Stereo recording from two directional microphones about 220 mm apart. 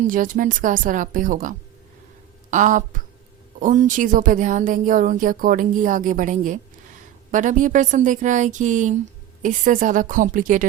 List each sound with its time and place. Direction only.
0.1 s speech: 35° right (ahead or behind)